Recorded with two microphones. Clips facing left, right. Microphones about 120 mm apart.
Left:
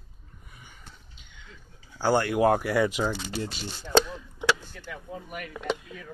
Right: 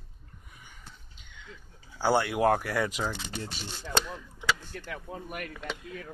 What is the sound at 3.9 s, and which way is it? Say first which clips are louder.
Chop: left 8 dB; 70° left (ahead or behind).